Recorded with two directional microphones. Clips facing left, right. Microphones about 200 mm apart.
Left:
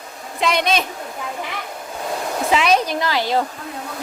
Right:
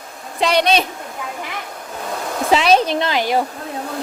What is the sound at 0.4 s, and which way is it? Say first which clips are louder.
Speech: right 3 dB; 30° right (ahead or behind).